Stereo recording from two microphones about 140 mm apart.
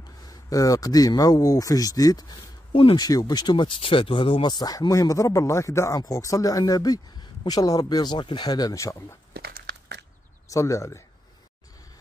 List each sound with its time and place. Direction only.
0.0 s speech: 25° left (ahead or behind)
3.1 s speech: 30° left (ahead or behind)
9.3 s crumpling: 90° right
10.5 s speech: 20° left (ahead or behind)